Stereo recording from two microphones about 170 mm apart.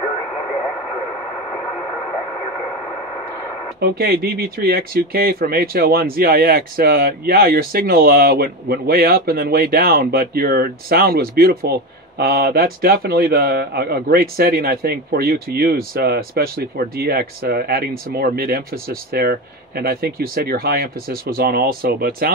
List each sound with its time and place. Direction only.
3.8 s speech: 65° right (ahead or behind)